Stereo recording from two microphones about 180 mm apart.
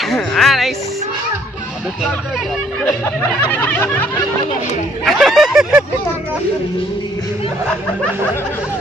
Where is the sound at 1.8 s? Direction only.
Centre (ahead or behind).